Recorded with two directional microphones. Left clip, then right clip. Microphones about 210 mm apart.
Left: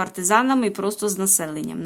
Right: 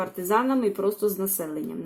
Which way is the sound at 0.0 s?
20° left (ahead or behind).